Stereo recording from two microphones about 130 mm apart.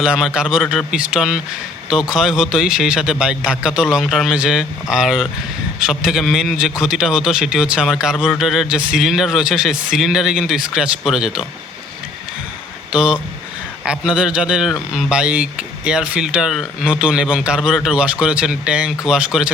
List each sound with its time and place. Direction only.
0.0 s a man's voice: 5° right (ahead or behind)
12.9 s speech: 5° right (ahead or behind)